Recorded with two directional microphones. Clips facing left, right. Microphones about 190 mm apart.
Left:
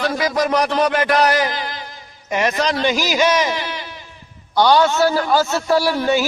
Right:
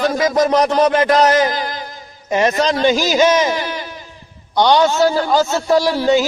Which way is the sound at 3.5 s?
45° right (ahead or behind).